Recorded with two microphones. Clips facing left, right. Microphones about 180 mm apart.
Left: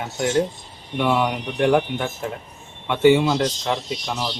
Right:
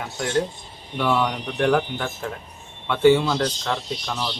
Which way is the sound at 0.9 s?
15° left (ahead or behind).